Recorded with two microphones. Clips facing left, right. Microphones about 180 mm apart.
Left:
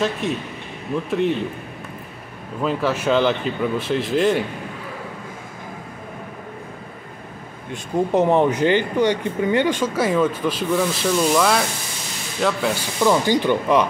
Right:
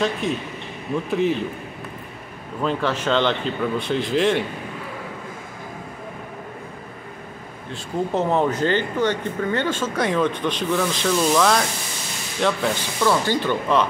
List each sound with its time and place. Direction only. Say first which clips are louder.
0.0 s a man's voice: even; centre (ahead or behind)
2.6 s a man's voice: left 2 dB; 5° left (ahead or behind)
7.7 s a man's voice: left 4 dB; 15° left (ahead or behind)
13.0 s speech: left 3 dB; 15° left (ahead or behind)